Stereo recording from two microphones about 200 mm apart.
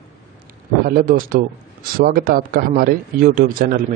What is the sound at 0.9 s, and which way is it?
A man's voice, 45° right (ahead or behind).